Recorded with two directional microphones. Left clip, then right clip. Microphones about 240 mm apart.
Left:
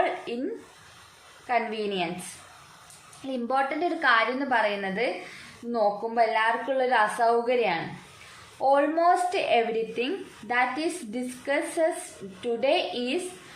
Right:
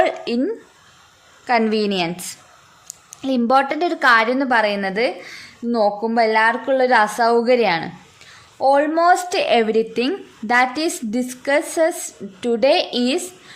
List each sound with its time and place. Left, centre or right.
0.3 s a woman's voice: right
1.5 s a woman's voice: right
3.2 s a woman's voice: right